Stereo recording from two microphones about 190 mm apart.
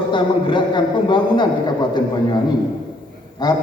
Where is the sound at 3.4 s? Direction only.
20° left (ahead or behind).